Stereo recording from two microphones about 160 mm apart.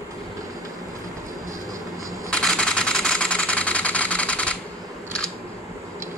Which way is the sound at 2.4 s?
5° left (ahead or behind).